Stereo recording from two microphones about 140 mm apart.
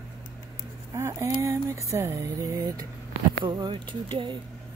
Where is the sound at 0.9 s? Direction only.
20° right (ahead or behind).